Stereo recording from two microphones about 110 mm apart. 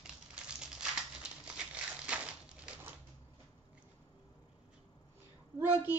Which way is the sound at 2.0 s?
10° right (ahead or behind).